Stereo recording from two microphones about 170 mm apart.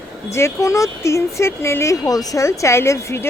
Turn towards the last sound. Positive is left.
turn(degrees=15)  # may be behind; listen again after turning